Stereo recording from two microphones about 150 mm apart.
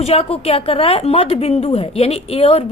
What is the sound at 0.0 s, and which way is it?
A woman's voice, 40° left (ahead or behind).